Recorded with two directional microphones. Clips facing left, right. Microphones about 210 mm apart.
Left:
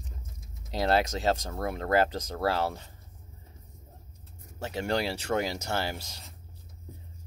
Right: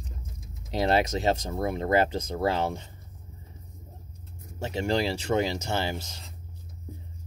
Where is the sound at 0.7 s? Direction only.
20° right (ahead or behind).